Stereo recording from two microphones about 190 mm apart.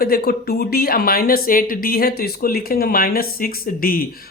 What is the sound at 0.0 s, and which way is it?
Speech, 55° left (ahead or behind).